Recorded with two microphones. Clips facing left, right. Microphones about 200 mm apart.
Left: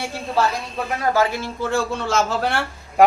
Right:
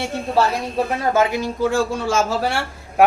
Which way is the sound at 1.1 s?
20° right (ahead or behind).